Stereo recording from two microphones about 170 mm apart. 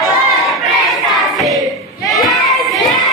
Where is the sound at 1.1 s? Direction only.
Centre (ahead or behind).